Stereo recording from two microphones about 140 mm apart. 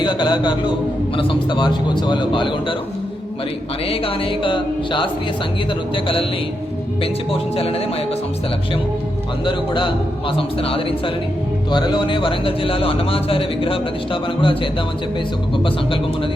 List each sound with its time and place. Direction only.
0.0 s a man's voice: 30° left (ahead or behind)
3.8 s a man's voice: 40° left (ahead or behind)
7.0 s speech: 45° left (ahead or behind)
9.4 s a man's voice: 35° left (ahead or behind)